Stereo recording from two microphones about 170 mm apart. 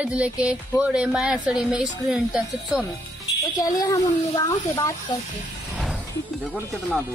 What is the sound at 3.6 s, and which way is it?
Speech, 20° left (ahead or behind).